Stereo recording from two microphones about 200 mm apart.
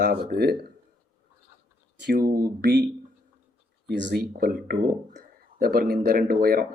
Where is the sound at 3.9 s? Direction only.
60° right (ahead or behind).